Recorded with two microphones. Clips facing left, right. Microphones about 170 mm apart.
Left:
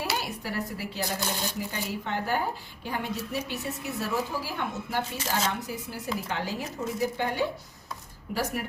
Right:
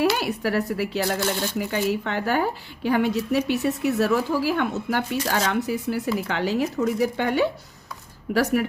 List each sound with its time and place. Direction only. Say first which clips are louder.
0.2 s speech: right 9 dB; 75° right (ahead or behind)